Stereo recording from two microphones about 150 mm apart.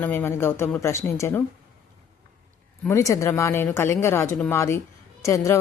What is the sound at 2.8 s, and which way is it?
Speech, 20° left (ahead or behind).